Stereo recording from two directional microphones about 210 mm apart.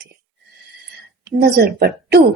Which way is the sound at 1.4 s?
50° right (ahead or behind).